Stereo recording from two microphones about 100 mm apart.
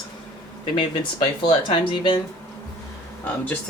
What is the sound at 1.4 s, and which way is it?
Speech, 60° left (ahead or behind).